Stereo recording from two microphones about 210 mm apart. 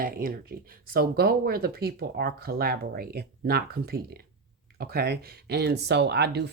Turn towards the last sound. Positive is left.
turn(degrees=-50)  # may be behind; listen again after turning